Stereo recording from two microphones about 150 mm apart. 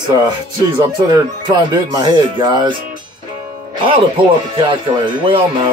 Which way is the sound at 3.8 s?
40° right (ahead or behind).